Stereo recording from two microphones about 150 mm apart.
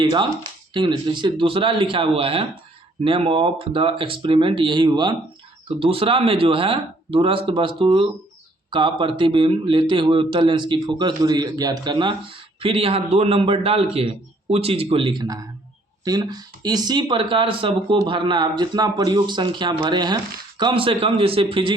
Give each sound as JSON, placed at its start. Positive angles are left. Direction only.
{"t": 0.0, "sound": "speech", "side_deg": -30}